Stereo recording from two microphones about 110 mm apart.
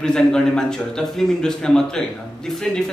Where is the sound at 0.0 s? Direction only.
5° left (ahead or behind).